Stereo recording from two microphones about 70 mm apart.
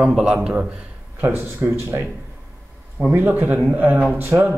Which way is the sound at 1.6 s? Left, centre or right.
Right.